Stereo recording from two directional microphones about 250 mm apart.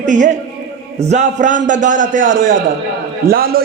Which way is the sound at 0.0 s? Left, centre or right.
Right.